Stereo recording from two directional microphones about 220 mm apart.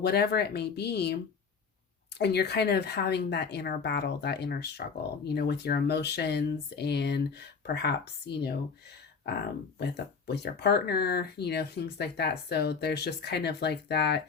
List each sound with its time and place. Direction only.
0.0 s speech: 45° left (ahead or behind)